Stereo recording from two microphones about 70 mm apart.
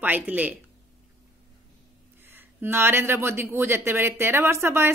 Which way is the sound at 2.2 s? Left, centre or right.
Right.